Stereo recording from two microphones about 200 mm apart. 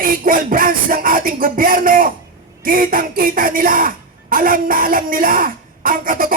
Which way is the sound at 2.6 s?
45° right (ahead or behind).